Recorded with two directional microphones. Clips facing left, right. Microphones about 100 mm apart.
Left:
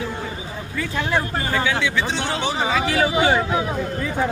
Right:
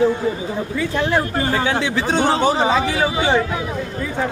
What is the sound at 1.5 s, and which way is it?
A man's voice, 30° right (ahead or behind).